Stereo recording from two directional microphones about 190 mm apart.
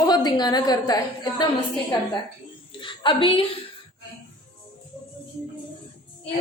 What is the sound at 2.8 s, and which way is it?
Speech, 25° left (ahead or behind).